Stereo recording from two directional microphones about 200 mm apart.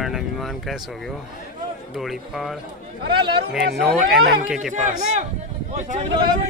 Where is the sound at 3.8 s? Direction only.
Centre (ahead or behind).